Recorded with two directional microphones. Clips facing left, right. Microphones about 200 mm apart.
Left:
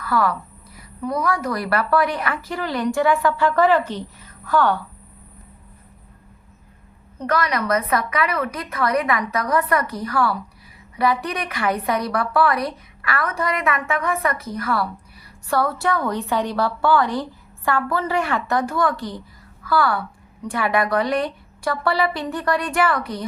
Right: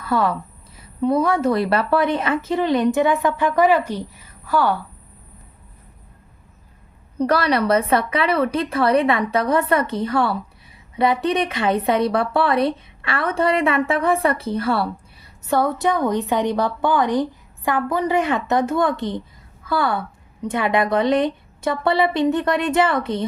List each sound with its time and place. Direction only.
0.0 s speech: 25° right (ahead or behind); by 4.8 s 10° right (ahead or behind)
7.2 s speech: 35° right (ahead or behind)